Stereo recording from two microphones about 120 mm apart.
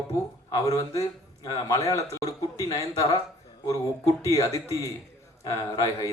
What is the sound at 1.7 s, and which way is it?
A woman's voice, 30° left (ahead or behind).